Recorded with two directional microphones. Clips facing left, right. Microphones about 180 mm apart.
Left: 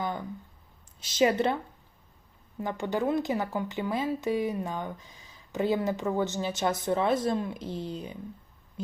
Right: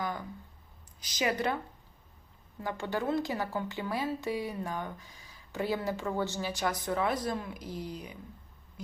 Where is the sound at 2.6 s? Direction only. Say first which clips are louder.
Left 4 dB; 20° left (ahead or behind).